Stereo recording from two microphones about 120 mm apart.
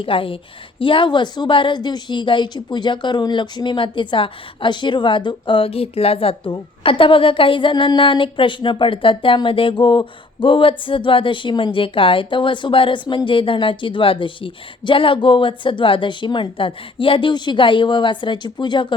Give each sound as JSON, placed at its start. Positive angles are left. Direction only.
{"t": 0.0, "sound": "a woman's voice", "side_deg": 50}